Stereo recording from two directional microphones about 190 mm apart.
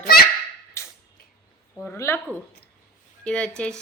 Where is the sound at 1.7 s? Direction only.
10° left (ahead or behind).